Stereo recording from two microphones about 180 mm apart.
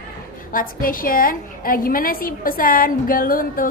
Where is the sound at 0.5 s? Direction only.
50° left (ahead or behind).